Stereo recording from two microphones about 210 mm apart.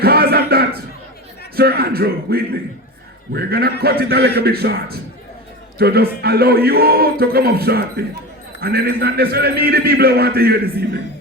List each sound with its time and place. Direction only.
0.0 s music: 45° right (ahead or behind)
1.5 s a man's voice: 45° right (ahead or behind)